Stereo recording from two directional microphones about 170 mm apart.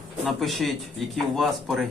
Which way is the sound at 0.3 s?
Centre (ahead or behind).